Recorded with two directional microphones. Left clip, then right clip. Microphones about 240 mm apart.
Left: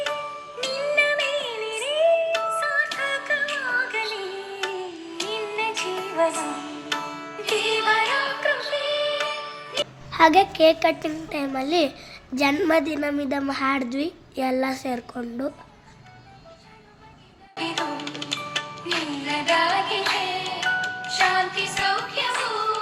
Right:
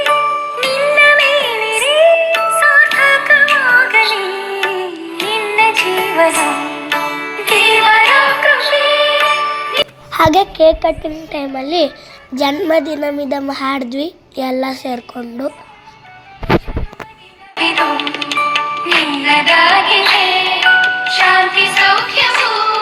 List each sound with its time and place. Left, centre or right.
0.0 s music: right
10.6 s speech: centre
17.6 s music: right